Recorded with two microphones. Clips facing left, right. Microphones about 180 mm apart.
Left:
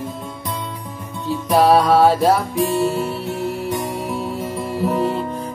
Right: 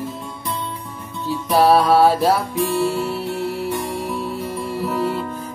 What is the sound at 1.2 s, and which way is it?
Music, centre (ahead or behind).